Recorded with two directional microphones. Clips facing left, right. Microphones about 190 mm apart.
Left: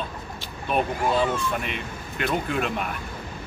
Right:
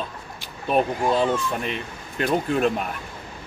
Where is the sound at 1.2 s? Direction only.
35° right (ahead or behind).